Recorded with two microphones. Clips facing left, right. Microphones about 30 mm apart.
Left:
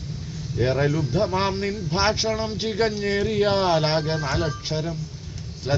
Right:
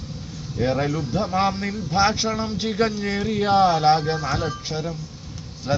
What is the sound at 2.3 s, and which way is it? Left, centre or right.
A man's voice, centre.